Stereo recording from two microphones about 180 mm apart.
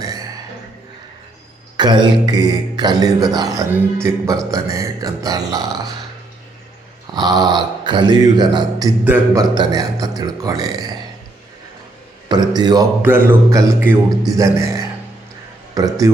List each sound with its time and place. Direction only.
1.7 s speech: 25° right (ahead or behind)
7.1 s speech: 20° right (ahead or behind)
9.0 s speech: 10° right (ahead or behind)
9.4 s speech: 20° right (ahead or behind)
12.3 s speech: 25° right (ahead or behind)
13.0 s speech: 10° right (ahead or behind)